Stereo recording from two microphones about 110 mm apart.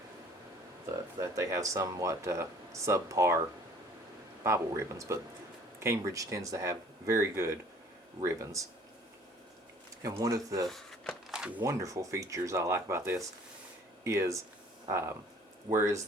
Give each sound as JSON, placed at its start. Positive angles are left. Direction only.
{"t": 1.2, "sound": "speech", "side_deg": -30}
{"t": 4.4, "sound": "speech", "side_deg": -25}
{"t": 10.0, "sound": "speech", "side_deg": -30}
{"t": 10.7, "sound": "a sound", "side_deg": 0}
{"t": 11.6, "sound": "speech", "side_deg": -30}
{"t": 15.7, "sound": "speech", "side_deg": -40}